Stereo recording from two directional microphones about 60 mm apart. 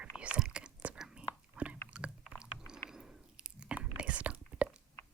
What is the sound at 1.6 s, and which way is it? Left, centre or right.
Biting, right.